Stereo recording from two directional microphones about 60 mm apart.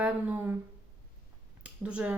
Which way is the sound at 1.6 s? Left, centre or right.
Centre.